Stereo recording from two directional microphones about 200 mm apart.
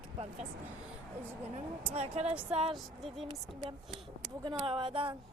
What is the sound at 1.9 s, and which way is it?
Speech, 30° right (ahead or behind).